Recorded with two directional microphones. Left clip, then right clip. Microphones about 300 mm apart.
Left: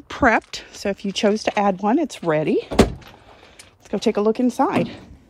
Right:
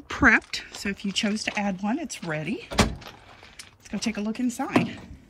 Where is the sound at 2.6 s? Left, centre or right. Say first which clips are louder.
Left 7 dB; left.